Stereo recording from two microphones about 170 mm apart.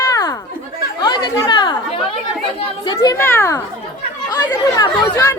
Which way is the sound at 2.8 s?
25° left (ahead or behind).